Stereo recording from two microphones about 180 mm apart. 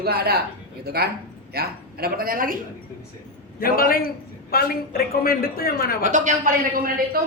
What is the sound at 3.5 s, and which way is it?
A man's voice, 55° left (ahead or behind).